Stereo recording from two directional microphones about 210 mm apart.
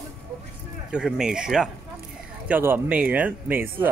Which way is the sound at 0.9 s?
Centre (ahead or behind).